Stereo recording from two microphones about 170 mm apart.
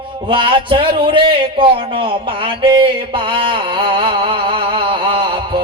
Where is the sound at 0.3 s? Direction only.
30° right (ahead or behind).